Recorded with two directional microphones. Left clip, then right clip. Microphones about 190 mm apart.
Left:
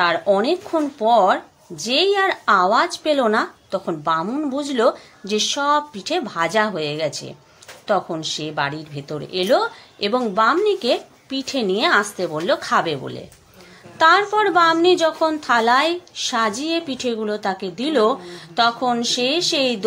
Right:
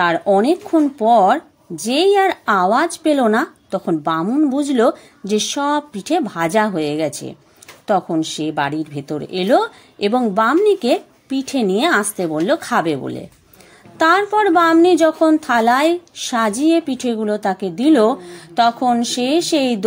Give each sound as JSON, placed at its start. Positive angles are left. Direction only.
{"t": 0.0, "sound": "speech", "side_deg": -40}